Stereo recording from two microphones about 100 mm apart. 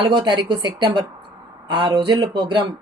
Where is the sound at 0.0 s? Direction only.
50° right (ahead or behind).